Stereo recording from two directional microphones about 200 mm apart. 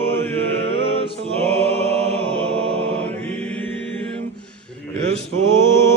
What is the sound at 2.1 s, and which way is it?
Chant, 30° right (ahead or behind).